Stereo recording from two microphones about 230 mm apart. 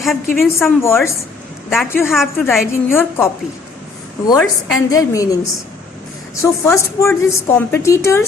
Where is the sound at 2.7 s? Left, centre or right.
Centre.